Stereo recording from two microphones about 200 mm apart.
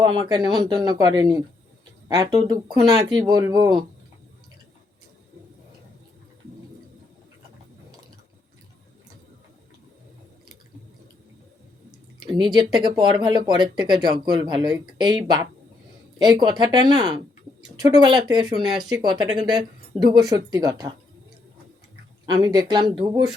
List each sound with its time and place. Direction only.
0.0 s speech: 20° right (ahead or behind)
12.2 s a sound: 20° right (ahead or behind)
12.5 s speech: 20° right (ahead or behind)
22.3 s speech: 20° right (ahead or behind)